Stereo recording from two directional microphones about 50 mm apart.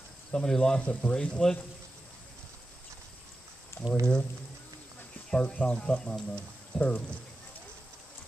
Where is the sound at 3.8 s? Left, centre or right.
Left.